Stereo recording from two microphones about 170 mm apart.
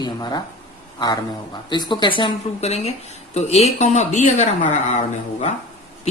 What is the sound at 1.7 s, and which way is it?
A woman's voice, 25° left (ahead or behind).